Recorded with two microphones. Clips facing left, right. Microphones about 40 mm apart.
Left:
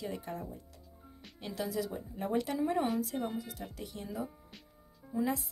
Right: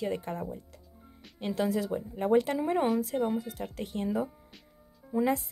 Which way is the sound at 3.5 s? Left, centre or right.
Right.